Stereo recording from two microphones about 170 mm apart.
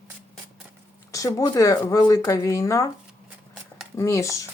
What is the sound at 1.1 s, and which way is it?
Speech, 20° left (ahead or behind).